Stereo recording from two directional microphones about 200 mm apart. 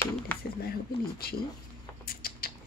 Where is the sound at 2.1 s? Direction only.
50° left (ahead or behind).